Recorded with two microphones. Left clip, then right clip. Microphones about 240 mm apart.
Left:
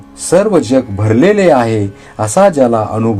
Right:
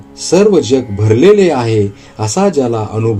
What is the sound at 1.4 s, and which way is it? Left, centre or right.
Speech, left.